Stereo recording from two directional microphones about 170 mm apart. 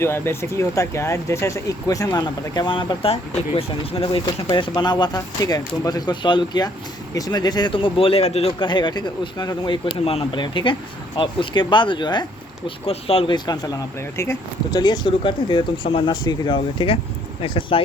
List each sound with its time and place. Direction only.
0.0 s speech: 15° left (ahead or behind); by 17.8 s 30° left (ahead or behind)